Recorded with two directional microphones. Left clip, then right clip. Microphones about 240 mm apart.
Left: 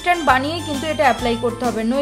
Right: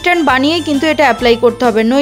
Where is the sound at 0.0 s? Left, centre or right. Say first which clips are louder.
Right 5 dB; right.